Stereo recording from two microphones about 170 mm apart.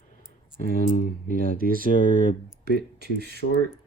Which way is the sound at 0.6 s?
55° left (ahead or behind).